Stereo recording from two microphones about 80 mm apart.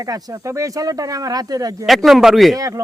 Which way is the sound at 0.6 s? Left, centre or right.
Right.